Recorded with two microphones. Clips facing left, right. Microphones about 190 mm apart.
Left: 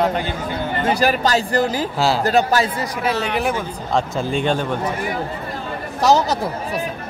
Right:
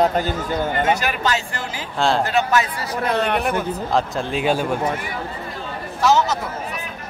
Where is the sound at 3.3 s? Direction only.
Centre (ahead or behind).